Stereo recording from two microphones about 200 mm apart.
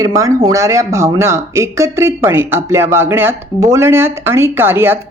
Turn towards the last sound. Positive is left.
turn(degrees=-10)  # may be behind; listen again after turning